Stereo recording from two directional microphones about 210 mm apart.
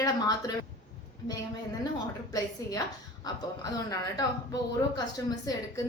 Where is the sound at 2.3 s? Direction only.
15° left (ahead or behind).